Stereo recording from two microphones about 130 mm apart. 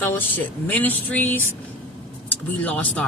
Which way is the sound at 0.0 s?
15° left (ahead or behind).